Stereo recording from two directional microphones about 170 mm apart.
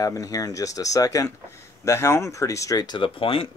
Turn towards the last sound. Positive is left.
turn(degrees=30)  # may be behind; listen again after turning